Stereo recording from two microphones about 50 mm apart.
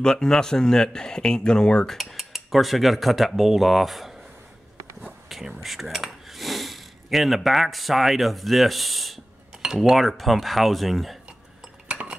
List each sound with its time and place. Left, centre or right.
0.0 s speech: centre
2.0 s cutlery: centre
5.6 s cutlery: centre
6.2 s speech: centre
9.8 s cutlery: centre
11.9 s a sound: centre